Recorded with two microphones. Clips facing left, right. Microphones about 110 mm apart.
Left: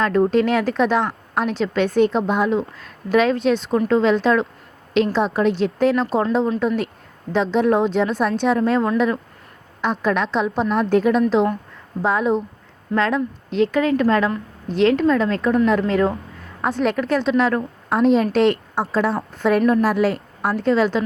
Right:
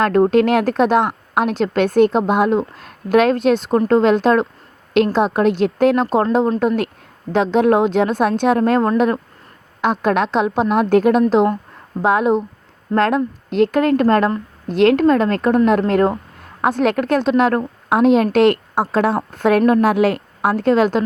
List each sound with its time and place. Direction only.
0.0 s a woman's voice: 60° right (ahead or behind)
6.6 s a woman's voice: 65° right (ahead or behind)
16.6 s speech: 70° right (ahead or behind); by 17.6 s 50° right (ahead or behind)
17.8 s speech: 65° right (ahead or behind)